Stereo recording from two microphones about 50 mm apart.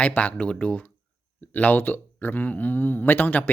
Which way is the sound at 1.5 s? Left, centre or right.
Left.